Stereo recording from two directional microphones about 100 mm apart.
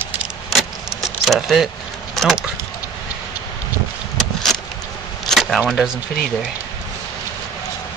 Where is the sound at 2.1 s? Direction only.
Centre (ahead or behind).